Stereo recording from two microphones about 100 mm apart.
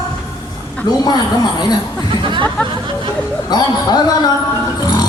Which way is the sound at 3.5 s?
45° left (ahead or behind).